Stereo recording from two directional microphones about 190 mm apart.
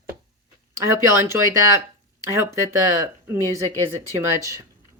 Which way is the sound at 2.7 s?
15° right (ahead or behind).